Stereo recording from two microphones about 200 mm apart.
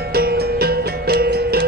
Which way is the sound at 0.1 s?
50° right (ahead or behind).